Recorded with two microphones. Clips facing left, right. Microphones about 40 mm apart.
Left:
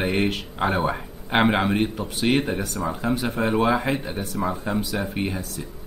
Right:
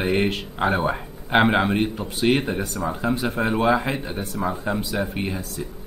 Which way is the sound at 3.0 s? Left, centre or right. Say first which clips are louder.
Right 1 dB; centre.